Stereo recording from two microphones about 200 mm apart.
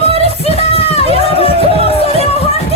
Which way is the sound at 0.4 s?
30° left (ahead or behind).